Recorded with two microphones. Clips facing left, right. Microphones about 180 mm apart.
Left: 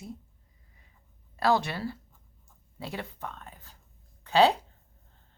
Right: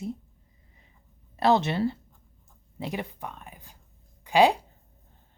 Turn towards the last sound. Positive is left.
turn(degrees=-15)  # may be behind; listen again after turning